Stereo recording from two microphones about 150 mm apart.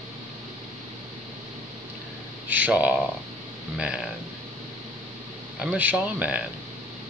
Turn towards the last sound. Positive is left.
turn(degrees=-10)  # may be behind; listen again after turning